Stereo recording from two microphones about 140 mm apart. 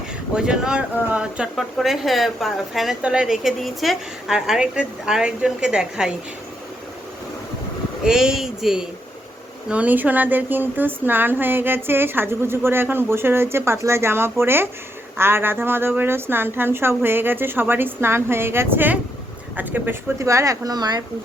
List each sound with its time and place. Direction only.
0.3 s speech: 5° right (ahead or behind)
8.0 s speech: 5° right (ahead or behind); by 21.0 s 30° right (ahead or behind)